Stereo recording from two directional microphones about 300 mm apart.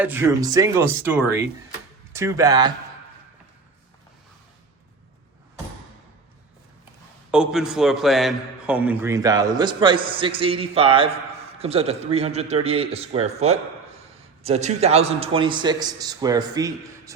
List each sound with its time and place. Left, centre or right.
0.0 s a man's voice: centre
7.3 s a man's voice: centre